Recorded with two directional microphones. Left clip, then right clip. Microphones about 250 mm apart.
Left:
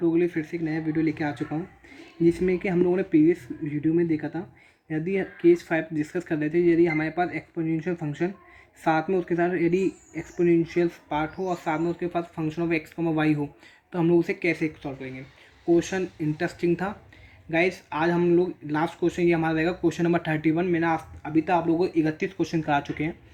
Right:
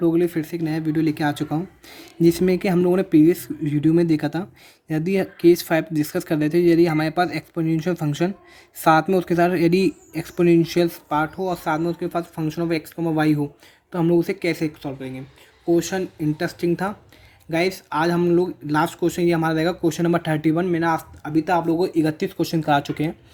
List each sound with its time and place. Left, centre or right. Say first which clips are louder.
0.0 s speech: right 4 dB; right